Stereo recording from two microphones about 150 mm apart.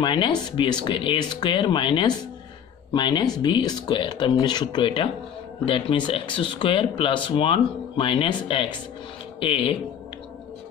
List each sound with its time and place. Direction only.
0.0 s speech: 30° left (ahead or behind)